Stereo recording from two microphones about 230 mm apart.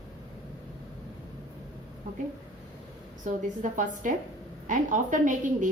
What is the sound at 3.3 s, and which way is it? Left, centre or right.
A woman's voice, right.